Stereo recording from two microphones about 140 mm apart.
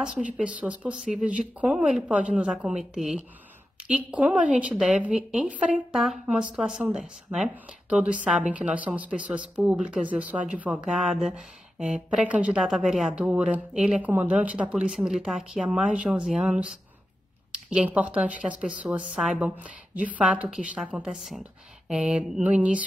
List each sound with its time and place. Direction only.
0.0 s a woman's voice: 10° right (ahead or behind)